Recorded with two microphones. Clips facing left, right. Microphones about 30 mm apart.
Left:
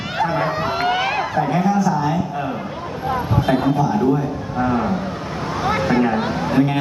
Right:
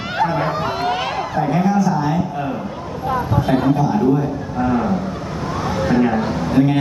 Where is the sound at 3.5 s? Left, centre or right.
Centre.